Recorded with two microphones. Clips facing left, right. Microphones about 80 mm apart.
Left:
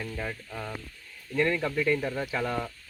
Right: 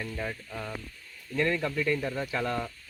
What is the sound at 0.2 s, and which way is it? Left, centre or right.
Speech, centre.